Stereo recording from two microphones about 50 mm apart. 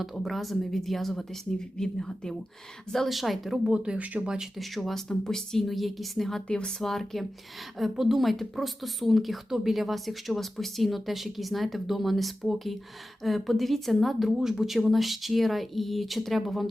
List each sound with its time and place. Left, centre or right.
0.0 s a woman's voice: centre
3.7 s speech: centre
4.5 s a woman's voice: centre
6.5 s a woman's voice: centre